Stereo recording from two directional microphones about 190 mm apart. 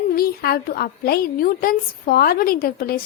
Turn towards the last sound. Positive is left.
turn(degrees=50)  # may be behind; listen again after turning